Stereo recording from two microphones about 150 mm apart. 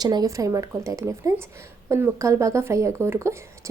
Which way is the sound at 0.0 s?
25° right (ahead or behind).